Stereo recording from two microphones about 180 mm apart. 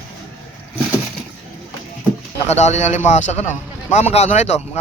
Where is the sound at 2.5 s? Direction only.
40° left (ahead or behind).